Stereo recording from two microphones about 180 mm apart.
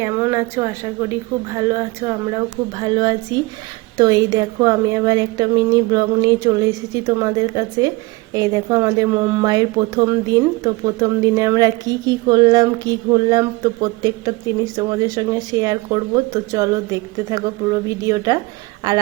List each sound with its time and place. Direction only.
0.0 s a woman's voice: 15° right (ahead or behind)